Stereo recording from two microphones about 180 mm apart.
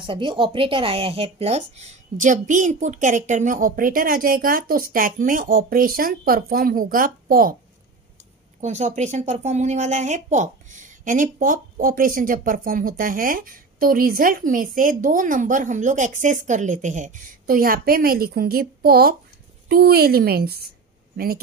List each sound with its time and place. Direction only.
0.0 s a woman's voice: 25° right (ahead or behind); by 7.5 s 50° right (ahead or behind)
8.5 s a woman's voice: 40° right (ahead or behind); by 20.7 s 60° right (ahead or behind)